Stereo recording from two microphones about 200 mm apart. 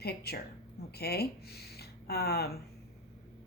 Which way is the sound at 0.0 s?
55° left (ahead or behind).